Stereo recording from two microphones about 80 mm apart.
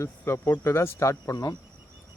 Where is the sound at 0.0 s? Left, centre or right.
Left.